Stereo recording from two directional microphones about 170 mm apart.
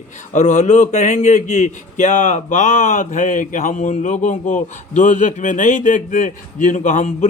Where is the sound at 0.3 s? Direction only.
45° left (ahead or behind).